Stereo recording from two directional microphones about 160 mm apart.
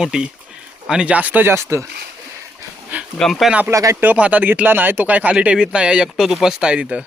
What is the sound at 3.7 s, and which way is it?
Speech, 20° right (ahead or behind).